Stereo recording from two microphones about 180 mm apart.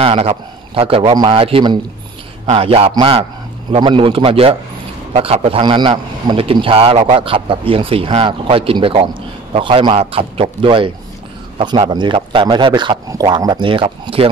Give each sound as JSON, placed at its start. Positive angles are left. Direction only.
{"t": 0.0, "sound": "a man's voice", "side_deg": -30}